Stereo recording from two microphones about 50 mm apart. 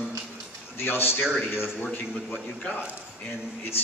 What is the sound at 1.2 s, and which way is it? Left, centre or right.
Speech, centre.